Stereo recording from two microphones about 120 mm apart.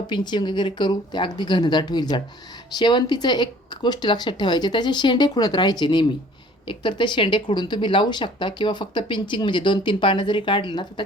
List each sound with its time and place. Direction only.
0.1 s speech: 40° left (ahead or behind)